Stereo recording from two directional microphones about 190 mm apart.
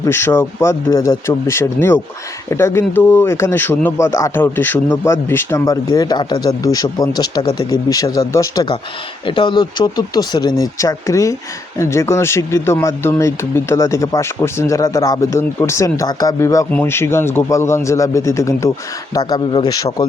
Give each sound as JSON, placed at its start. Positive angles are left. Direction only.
{"t": 0.0, "sound": "speech", "side_deg": 15}